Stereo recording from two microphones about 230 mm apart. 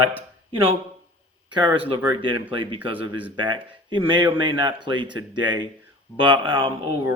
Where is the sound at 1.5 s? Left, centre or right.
Centre.